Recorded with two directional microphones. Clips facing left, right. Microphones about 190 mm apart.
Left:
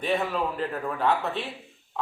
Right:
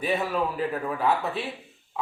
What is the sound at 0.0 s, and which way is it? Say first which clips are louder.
A man's voice: even; 5° right (ahead or behind).